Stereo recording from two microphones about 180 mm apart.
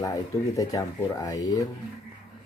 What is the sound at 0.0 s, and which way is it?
Speech, 20° left (ahead or behind).